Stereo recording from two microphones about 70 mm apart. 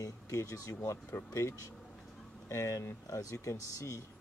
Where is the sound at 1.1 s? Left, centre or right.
Left.